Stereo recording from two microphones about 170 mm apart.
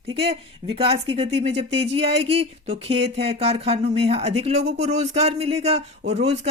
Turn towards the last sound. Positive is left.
turn(degrees=-40)  # may be behind; listen again after turning